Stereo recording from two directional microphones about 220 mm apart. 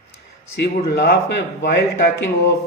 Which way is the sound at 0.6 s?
45° left (ahead or behind).